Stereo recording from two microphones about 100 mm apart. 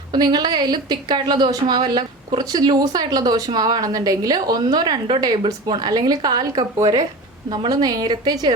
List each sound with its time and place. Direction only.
0.1 s a woman's voice: 45° right (ahead or behind)
7.7 s a woman's voice: 40° right (ahead or behind)